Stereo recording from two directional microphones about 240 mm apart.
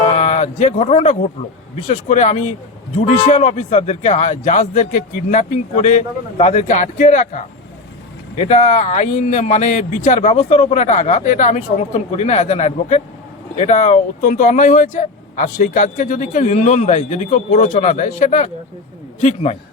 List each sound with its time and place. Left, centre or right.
0.0 s speech: left